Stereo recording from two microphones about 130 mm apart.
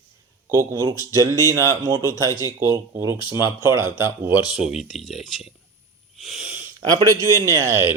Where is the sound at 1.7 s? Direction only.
20° right (ahead or behind); by 5.5 s centre (ahead or behind).